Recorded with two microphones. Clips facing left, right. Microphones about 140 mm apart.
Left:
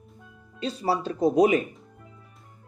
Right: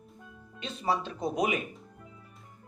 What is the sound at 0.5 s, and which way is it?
Speech, 35° left (ahead or behind).